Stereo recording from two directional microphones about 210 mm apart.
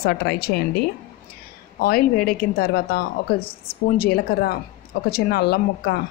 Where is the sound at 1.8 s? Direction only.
45° left (ahead or behind).